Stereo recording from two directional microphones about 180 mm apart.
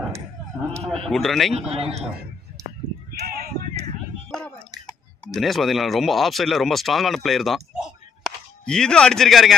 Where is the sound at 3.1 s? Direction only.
55° right (ahead or behind).